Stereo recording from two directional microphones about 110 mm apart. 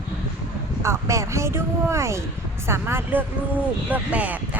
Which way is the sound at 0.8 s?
25° right (ahead or behind).